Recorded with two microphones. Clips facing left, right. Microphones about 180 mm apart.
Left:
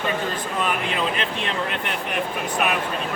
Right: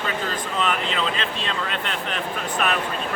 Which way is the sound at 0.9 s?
15° left (ahead or behind).